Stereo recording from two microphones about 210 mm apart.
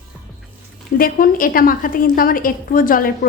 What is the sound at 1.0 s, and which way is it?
A woman's voice, 40° left (ahead or behind).